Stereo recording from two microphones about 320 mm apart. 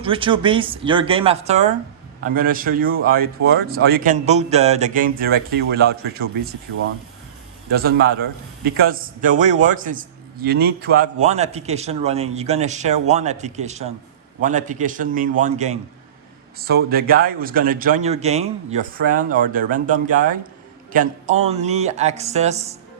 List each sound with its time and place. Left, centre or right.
0.0 s a man's voice: centre
7.7 s a man's voice: right